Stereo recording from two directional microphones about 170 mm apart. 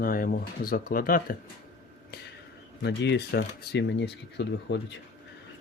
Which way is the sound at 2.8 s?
80° left.